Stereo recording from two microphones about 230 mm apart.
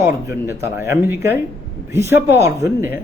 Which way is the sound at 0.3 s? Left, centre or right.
Centre.